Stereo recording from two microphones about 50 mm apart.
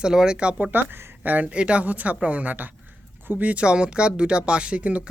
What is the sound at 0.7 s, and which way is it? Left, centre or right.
Speech, right.